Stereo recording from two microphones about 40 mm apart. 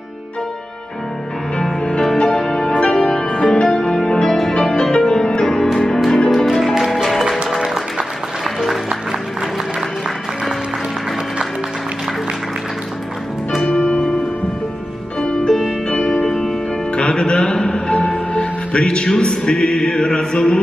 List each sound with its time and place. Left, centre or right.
2.1 s music: centre
4.4 s music: centre
6.8 s music: centre
13.7 s music: left
15.2 s music: centre
16.3 s music: centre
16.9 s music: left